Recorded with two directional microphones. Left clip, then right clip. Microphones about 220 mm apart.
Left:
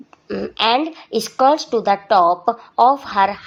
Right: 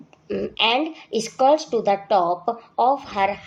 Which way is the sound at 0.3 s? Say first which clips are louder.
Left 3 dB; 15° left (ahead or behind).